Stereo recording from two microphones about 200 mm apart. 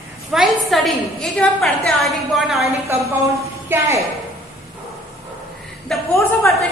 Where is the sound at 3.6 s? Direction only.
15° right (ahead or behind).